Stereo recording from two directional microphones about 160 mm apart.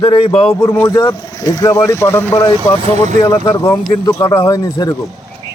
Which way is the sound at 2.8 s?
40° right (ahead or behind).